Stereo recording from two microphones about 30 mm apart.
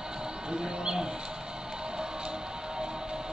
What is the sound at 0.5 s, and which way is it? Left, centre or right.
Livestock, right.